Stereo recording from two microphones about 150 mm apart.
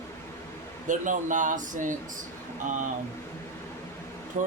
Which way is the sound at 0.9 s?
60° right (ahead or behind).